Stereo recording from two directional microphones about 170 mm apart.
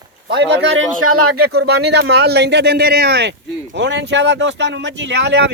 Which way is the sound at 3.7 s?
90° right.